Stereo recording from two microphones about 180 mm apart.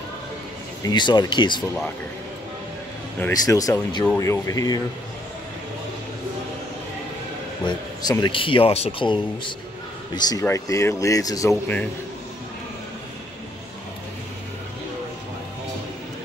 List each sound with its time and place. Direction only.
0.8 s speech: 25° left (ahead or behind)
3.2 s a man's voice: 15° left (ahead or behind)
7.6 s a man's voice: 25° left (ahead or behind)